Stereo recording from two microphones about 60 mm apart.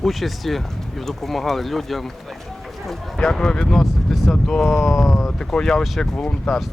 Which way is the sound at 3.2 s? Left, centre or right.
Centre.